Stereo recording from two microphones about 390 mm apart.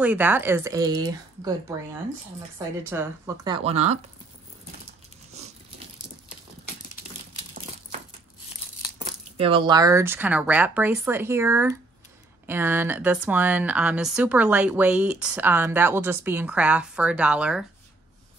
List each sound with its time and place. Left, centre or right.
0.0 s speech: centre
2.9 s speech: centre
5.4 s dog: centre
8.9 s speech: centre